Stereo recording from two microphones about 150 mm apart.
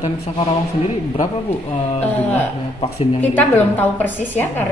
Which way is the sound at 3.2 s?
10° left (ahead or behind).